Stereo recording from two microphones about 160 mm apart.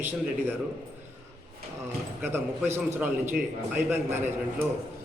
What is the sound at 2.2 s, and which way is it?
A man's voice, 15° right (ahead or behind).